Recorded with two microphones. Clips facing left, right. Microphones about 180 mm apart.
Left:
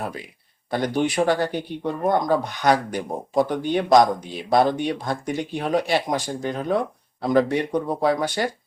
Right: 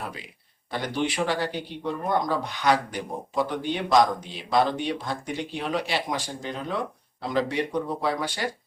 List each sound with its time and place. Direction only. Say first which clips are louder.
0.7 s speech: left 5 dB; 45° left (ahead or behind)